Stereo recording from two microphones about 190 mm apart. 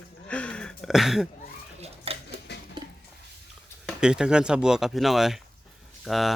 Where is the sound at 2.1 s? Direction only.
30° right (ahead or behind).